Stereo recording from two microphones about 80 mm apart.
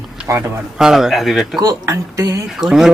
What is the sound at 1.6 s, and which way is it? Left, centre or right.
Speech, right.